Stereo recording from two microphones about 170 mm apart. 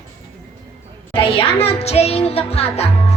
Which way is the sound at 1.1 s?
35° left (ahead or behind).